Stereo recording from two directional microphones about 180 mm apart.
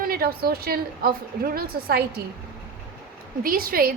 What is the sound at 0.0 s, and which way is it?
A woman's voice, 55° right (ahead or behind).